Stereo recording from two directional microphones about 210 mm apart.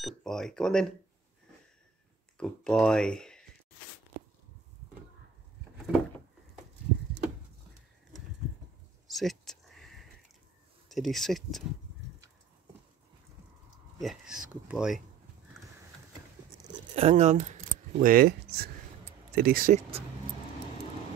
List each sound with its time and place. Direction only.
0.0 s speech: centre (ahead or behind)
2.3 s speech: 5° left (ahead or behind)
9.1 s a sound: centre (ahead or behind)
10.9 s speech: centre (ahead or behind)
13.9 s speech: centre (ahead or behind)
16.9 s speech: 30° right (ahead or behind)
17.9 s speech: 45° right (ahead or behind)